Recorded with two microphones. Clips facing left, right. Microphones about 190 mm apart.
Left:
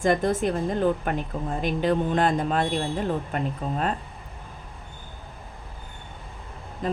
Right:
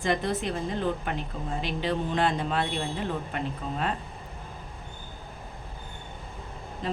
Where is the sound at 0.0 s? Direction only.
50° left (ahead or behind).